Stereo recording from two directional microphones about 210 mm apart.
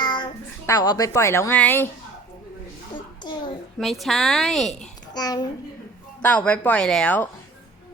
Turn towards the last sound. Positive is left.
turn(degrees=5)  # may be behind; listen again after turning